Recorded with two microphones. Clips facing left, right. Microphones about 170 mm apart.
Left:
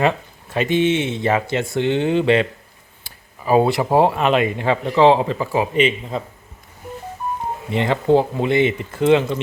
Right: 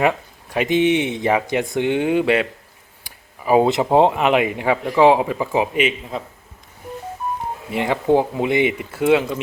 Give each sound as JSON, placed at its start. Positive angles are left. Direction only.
{"t": 0.0, "sound": "speech", "side_deg": -15}
{"t": 5.7, "sound": "speech", "side_deg": -5}
{"t": 7.7, "sound": "speech", "side_deg": -10}